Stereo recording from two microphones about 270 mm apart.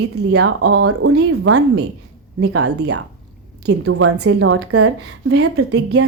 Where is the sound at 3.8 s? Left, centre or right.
Right.